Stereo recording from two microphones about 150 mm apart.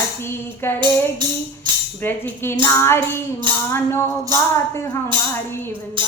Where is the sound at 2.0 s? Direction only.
15° left (ahead or behind).